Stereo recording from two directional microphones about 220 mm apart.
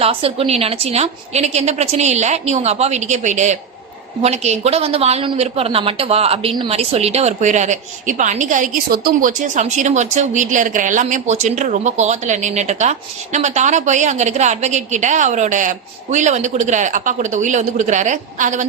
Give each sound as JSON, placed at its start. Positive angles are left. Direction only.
{"t": 0.0, "sound": "a woman's voice", "side_deg": -25}